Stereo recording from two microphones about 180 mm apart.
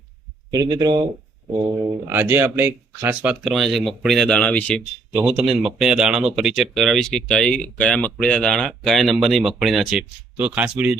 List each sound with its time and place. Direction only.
0.5 s speech: 20° right (ahead or behind)
2.0 s speech: 10° right (ahead or behind); by 4.8 s 5° left (ahead or behind)
5.1 s speech: 5° right (ahead or behind)